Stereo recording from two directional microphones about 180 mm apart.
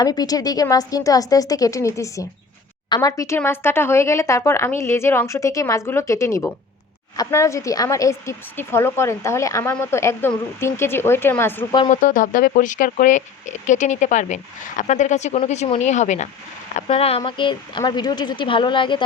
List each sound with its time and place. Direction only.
0.0 s a woman's voice: 20° left (ahead or behind)
11.9 s a woman's voice: 45° left (ahead or behind); by 19.0 s 25° left (ahead or behind)